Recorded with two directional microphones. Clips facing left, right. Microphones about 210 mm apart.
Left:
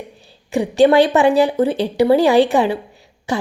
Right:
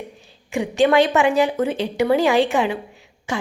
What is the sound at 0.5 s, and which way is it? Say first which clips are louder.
A woman's voice: left 4 dB; 35° left (ahead or behind).